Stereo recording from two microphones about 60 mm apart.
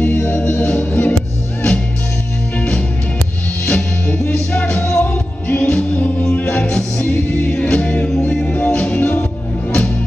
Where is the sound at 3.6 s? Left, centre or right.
Centre.